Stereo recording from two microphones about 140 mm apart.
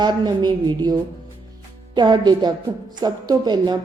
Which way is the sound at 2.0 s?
30° right (ahead or behind).